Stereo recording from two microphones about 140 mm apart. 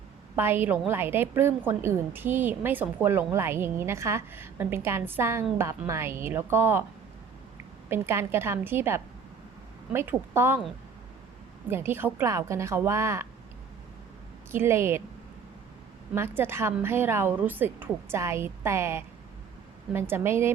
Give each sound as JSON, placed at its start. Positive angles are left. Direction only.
{"t": 0.3, "sound": "a woman's voice", "side_deg": -15}
{"t": 7.9, "sound": "a woman's voice", "side_deg": -15}
{"t": 11.7, "sound": "a woman's voice", "side_deg": -15}
{"t": 14.5, "sound": "a woman's voice", "side_deg": -20}
{"t": 16.1, "sound": "a woman's voice", "side_deg": -15}